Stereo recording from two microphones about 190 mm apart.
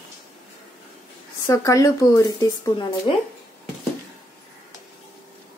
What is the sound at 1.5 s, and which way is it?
Speech, 15° left (ahead or behind).